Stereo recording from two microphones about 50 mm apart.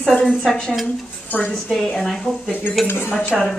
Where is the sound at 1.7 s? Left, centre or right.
Centre.